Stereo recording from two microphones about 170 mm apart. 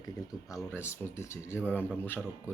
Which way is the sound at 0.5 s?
15° left (ahead or behind).